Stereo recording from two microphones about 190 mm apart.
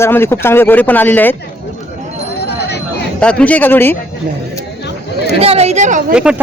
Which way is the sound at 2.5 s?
60° left (ahead or behind).